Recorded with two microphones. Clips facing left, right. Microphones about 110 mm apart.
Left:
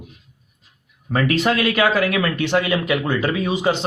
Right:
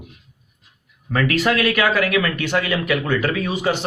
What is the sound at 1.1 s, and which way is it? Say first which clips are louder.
Speech: even; 25° left (ahead or behind).